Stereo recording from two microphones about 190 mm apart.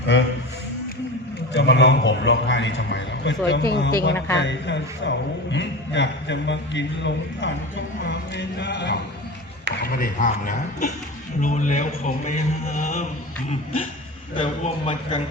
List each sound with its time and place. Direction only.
1.5 s a man's voice: 65° left (ahead or behind)
9.8 s a man's voice: 50° left (ahead or behind)
14.3 s a man's voice: 30° left (ahead or behind)